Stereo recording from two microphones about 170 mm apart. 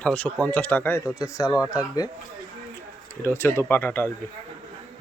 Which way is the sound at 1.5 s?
5° right (ahead or behind).